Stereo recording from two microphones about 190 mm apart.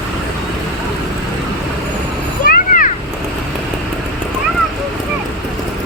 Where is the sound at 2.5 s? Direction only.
45° left (ahead or behind).